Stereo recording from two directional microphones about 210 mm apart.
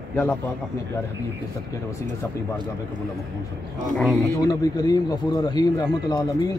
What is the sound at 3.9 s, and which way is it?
Speech, centre (ahead or behind).